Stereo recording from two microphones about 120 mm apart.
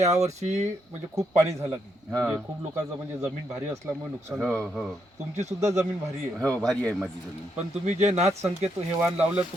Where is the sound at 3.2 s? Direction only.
20° right (ahead or behind).